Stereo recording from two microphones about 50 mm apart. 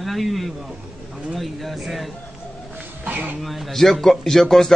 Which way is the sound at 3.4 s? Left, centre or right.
Centre.